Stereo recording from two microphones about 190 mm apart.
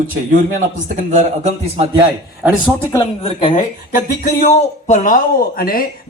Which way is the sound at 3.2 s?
30° left (ahead or behind).